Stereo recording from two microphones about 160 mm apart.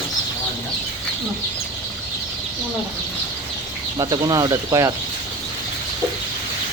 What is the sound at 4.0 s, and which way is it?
Speech, 25° right (ahead or behind).